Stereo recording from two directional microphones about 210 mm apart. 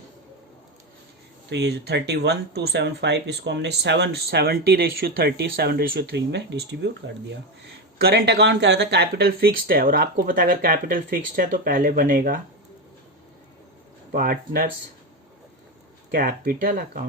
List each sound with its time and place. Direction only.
1.5 s speech: 50° right (ahead or behind)
14.1 s speech: 45° right (ahead or behind)
16.1 s speech: 45° right (ahead or behind)